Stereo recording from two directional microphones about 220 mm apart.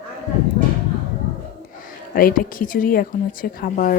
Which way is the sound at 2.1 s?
40° left (ahead or behind).